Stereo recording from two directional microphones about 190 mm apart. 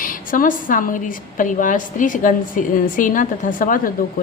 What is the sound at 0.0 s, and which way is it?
A woman's voice, 45° left (ahead or behind).